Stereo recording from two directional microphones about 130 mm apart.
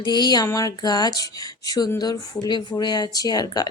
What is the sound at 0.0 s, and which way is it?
Speech, 35° left (ahead or behind).